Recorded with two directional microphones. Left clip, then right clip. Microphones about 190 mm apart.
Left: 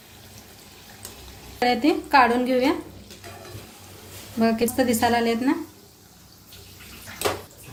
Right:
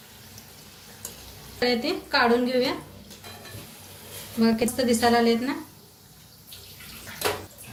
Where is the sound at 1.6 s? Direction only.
55° left (ahead or behind).